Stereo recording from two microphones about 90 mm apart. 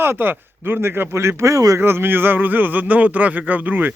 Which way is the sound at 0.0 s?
25° right (ahead or behind).